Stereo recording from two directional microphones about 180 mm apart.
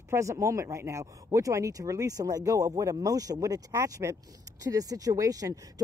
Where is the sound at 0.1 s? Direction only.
15° right (ahead or behind).